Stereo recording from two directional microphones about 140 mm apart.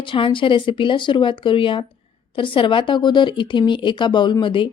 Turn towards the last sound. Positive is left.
turn(degrees=35)  # may be behind; listen again after turning